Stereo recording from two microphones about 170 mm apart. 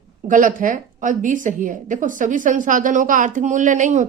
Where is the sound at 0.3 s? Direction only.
55° right (ahead or behind).